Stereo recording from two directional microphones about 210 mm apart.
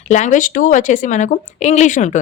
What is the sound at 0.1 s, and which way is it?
Speech, 35° left (ahead or behind).